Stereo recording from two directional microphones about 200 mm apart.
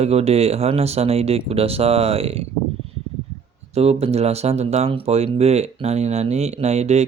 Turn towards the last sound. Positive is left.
turn(degrees=-35)  # may be behind; listen again after turning